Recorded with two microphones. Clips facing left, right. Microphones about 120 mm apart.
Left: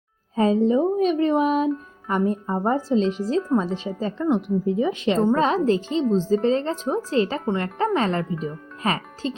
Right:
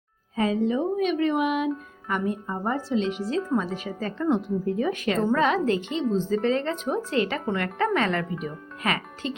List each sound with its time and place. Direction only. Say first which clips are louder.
0.3 s speech: left 5 dB; 35° left (ahead or behind)